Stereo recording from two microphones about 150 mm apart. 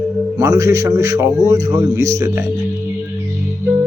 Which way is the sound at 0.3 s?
20° right (ahead or behind).